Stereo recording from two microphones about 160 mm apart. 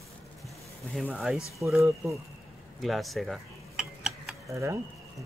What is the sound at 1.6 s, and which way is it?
Speech, 15° right (ahead or behind).